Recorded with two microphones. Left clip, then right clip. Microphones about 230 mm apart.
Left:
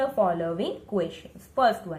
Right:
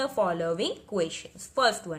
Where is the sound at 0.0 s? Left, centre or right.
Right.